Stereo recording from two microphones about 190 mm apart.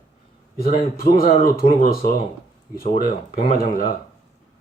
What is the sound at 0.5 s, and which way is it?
Speech, 50° left (ahead or behind).